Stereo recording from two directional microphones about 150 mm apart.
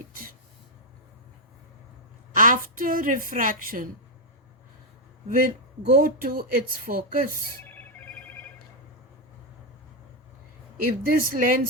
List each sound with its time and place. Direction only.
0.1 s a sound: 70° right (ahead or behind)
2.3 s a woman's voice: 65° right (ahead or behind)
5.3 s speech: 70° right (ahead or behind)
11.0 s speech: 70° right (ahead or behind)